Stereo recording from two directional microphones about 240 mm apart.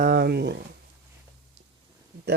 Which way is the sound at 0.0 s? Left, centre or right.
Right.